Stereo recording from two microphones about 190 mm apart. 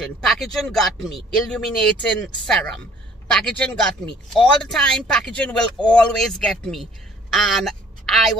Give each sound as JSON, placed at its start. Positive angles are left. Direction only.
{"t": 0.0, "sound": "a woman's voice", "side_deg": 0}